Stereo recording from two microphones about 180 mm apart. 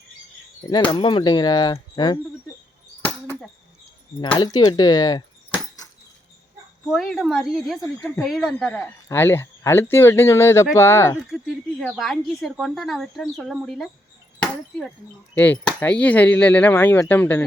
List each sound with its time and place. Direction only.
0.9 s speech: 25° left (ahead or behind)
3.0 s a sound: 10° left (ahead or behind)
4.2 s speech: 25° left (ahead or behind)
6.8 s a woman's voice: centre (ahead or behind)
9.0 s speech: 10° left (ahead or behind)
11.2 s a woman's voice: centre (ahead or behind)